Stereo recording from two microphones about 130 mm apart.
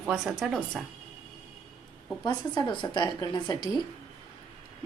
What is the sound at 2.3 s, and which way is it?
A woman's voice, 35° left (ahead or behind).